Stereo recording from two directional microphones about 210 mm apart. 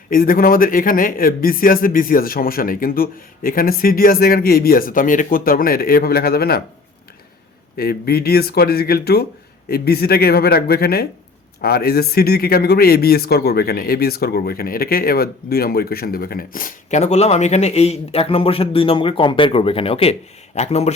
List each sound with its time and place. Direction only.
0.1 s speech: 40° left (ahead or behind)
7.8 s speech: 45° left (ahead or behind); by 20.9 s 30° left (ahead or behind)